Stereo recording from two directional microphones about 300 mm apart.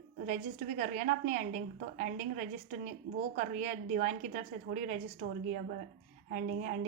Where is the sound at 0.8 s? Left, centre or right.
Right.